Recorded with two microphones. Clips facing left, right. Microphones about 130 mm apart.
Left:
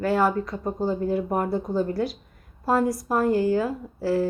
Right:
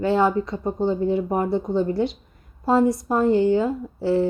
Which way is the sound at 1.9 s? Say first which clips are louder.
Right 3 dB; 25° right (ahead or behind).